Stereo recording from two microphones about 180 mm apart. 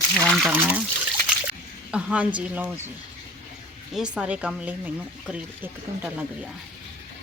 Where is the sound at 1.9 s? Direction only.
5° right (ahead or behind).